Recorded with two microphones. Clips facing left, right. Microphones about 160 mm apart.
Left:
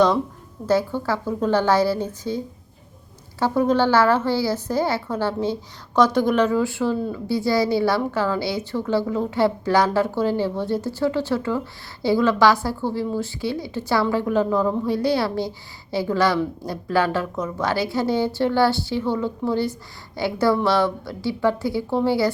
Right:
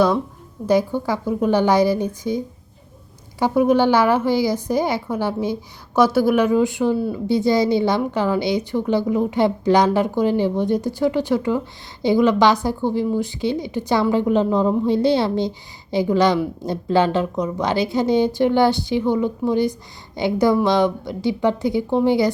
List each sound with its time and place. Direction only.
0.7 s a woman's voice: 15° right (ahead or behind)